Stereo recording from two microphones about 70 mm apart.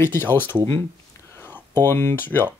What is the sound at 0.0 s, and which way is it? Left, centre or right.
Speech, left.